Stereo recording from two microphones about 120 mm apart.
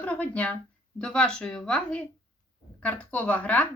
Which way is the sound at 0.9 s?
10° left (ahead or behind).